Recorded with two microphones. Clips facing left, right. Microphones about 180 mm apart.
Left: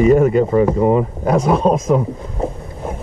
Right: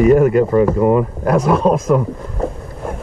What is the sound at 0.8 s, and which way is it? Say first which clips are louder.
Speech: right 1 dB; 25° left (ahead or behind).